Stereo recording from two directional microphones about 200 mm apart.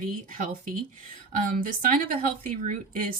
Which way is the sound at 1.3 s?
45° right (ahead or behind).